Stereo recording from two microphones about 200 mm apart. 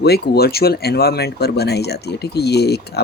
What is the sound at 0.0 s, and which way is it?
Speech, 50° left (ahead or behind).